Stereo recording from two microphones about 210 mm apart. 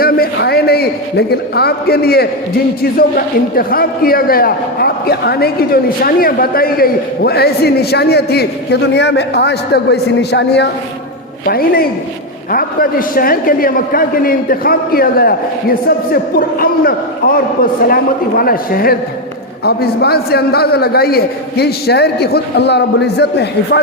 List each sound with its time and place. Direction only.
0.0 s a man's voice: 50° left (ahead or behind)